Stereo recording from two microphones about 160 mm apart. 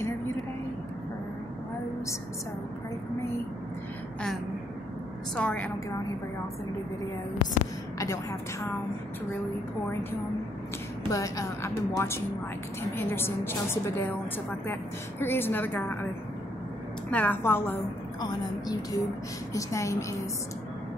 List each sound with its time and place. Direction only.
5.3 s a woman's voice: 5° left (ahead or behind)
8.0 s a woman's voice: 20° left (ahead or behind)
11.1 s a woman's voice: 20° left (ahead or behind)
17.1 s a woman's voice: 10° left (ahead or behind)